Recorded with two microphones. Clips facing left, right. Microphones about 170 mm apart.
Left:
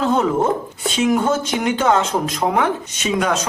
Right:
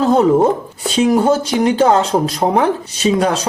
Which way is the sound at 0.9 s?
35° right (ahead or behind).